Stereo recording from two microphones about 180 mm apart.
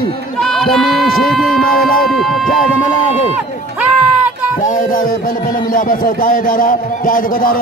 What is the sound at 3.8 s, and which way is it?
Run, 5° right (ahead or behind).